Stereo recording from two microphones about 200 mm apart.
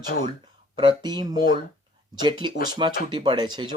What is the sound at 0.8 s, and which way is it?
Speech, 20° right (ahead or behind).